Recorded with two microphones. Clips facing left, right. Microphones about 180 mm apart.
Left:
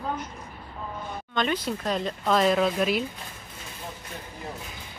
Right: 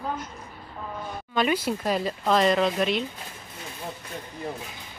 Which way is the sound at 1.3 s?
10° right (ahead or behind).